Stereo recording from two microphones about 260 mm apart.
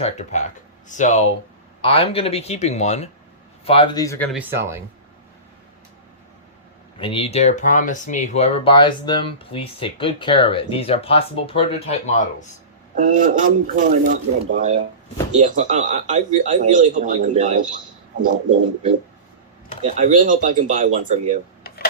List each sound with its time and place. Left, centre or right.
0.0 s speech: left
4.3 s speech: centre
7.0 s speech: left
13.0 s speech: right
19.8 s speech: right